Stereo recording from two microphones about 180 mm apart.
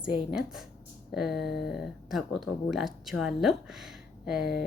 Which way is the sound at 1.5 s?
65° left (ahead or behind).